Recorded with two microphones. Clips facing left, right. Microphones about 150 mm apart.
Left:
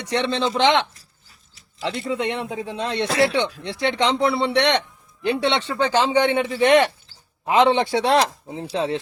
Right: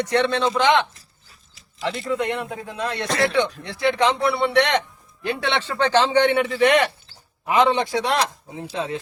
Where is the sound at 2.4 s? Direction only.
25° left (ahead or behind).